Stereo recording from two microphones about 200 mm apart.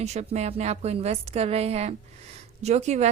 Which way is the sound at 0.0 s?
35° right (ahead or behind).